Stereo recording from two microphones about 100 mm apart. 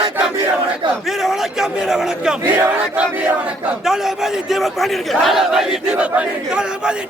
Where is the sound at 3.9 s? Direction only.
5° right (ahead or behind).